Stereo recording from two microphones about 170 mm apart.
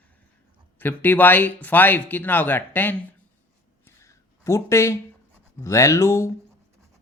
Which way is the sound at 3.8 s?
15° left (ahead or behind).